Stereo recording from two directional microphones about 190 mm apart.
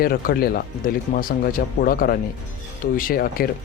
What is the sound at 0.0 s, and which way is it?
Speech, 50° left (ahead or behind).